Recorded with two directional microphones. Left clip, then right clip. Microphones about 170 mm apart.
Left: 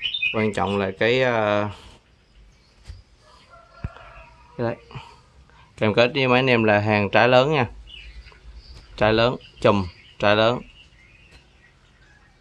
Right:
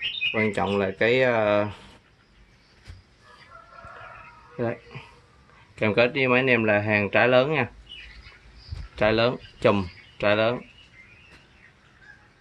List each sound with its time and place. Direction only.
0.3 s speech: 5° left (ahead or behind)
4.6 s speech: 5° left (ahead or behind)
8.9 s speech: 10° left (ahead or behind)